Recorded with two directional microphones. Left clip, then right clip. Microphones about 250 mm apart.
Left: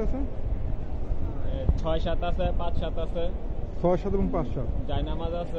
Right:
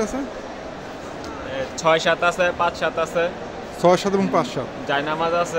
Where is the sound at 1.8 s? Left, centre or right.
Centre.